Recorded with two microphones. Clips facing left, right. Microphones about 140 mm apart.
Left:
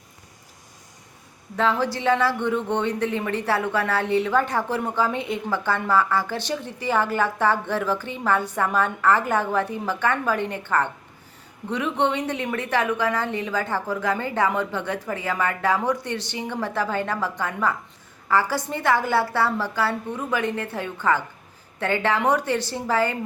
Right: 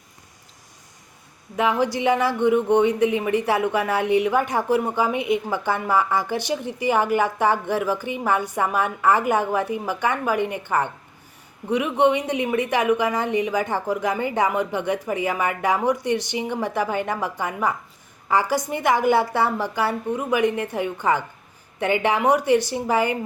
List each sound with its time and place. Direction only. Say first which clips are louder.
1.5 s speech: right 2 dB; 15° right (ahead or behind)